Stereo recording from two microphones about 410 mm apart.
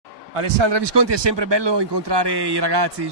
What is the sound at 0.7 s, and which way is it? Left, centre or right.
A man's voice, right.